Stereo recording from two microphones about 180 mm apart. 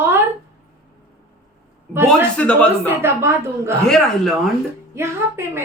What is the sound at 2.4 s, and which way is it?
Speech, 5° left (ahead or behind).